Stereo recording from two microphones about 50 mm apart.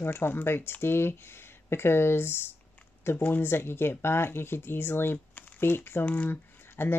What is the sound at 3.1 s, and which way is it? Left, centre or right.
Speech, left.